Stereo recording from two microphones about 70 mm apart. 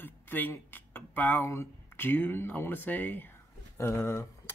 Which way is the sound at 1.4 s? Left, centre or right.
Left.